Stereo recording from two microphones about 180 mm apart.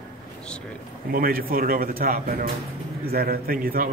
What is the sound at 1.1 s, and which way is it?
A man's voice, 55° right (ahead or behind).